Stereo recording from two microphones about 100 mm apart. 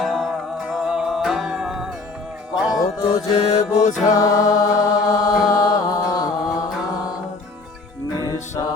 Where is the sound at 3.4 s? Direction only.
90° left.